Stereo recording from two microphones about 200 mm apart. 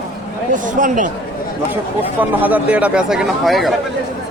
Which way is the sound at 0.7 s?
40° right (ahead or behind).